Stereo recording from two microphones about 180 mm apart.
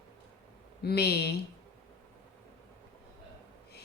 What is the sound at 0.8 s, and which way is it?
Speech, 60° left (ahead or behind).